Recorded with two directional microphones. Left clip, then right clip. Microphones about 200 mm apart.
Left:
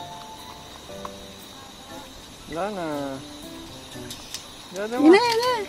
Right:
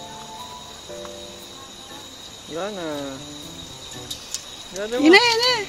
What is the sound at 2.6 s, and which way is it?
Speech, 40° left (ahead or behind).